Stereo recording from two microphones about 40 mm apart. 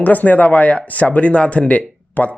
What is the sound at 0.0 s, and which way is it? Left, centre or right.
Speech, left.